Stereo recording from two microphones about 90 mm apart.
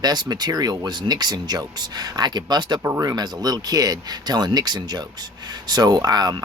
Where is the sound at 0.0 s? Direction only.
50° right (ahead or behind).